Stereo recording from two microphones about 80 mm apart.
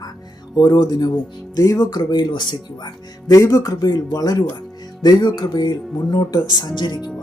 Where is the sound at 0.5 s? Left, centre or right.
Left.